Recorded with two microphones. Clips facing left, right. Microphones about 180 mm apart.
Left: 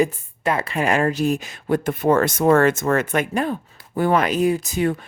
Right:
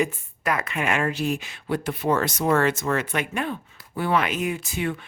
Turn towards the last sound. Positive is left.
turn(degrees=40)  # may be behind; listen again after turning